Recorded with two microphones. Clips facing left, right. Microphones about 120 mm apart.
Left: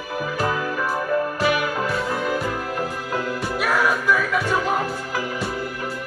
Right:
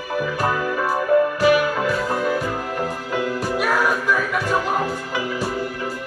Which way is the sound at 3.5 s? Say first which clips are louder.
Even; centre (ahead or behind).